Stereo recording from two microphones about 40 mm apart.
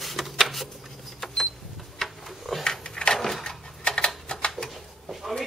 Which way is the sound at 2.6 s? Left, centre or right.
Centre.